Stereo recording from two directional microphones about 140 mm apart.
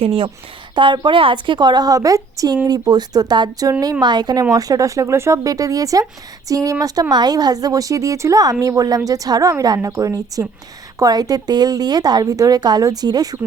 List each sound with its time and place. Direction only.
0.0 s a woman's voice: 45° right (ahead or behind); by 13.4 s 30° right (ahead or behind)